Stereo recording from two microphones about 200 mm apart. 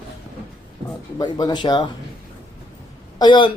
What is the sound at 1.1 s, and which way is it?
Speech, 20° left (ahead or behind).